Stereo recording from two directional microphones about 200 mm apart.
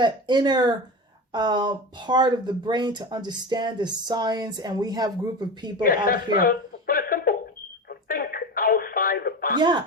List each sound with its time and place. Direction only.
0.0 s speech: 20° right (ahead or behind)
5.8 s speech: 45° left (ahead or behind)
7.9 s telephone: 45° left (ahead or behind)